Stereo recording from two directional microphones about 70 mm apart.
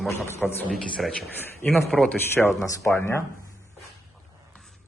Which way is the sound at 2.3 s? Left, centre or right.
Left.